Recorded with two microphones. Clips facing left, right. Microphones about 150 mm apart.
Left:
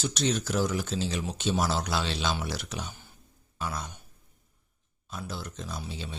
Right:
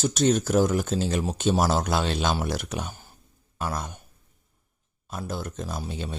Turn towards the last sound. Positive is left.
turn(degrees=-50)  # may be behind; listen again after turning